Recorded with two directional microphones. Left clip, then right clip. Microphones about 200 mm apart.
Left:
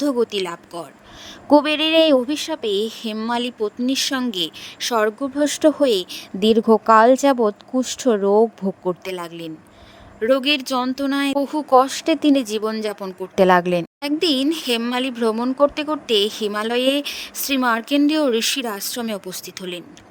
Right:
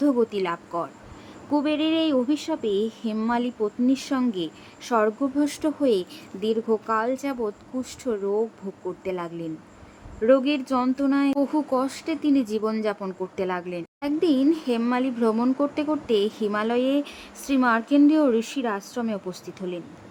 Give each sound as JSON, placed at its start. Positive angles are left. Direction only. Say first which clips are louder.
{"t": 0.0, "sound": "speech", "louder": "left 3 dB", "side_deg": 40}
{"t": 1.5, "sound": "speech", "louder": "left 8 dB", "side_deg": 45}